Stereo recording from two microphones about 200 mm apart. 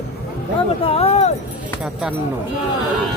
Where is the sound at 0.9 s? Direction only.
30° left (ahead or behind).